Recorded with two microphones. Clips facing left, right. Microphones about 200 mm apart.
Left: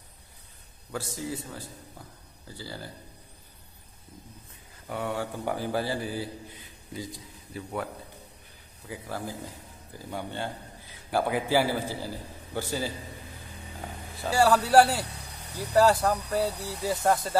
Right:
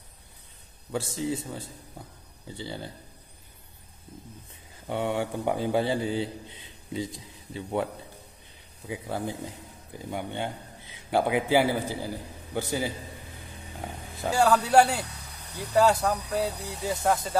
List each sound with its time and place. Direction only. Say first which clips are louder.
0.9 s a man's voice: right 4 dB; 25° right (ahead or behind)
4.8 s a man's voice: right 3 dB; 25° right (ahead or behind)
14.3 s speech: left 1 dB; 5° left (ahead or behind)